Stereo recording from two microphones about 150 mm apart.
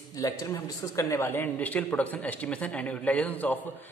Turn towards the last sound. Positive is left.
turn(degrees=10)  # may be behind; listen again after turning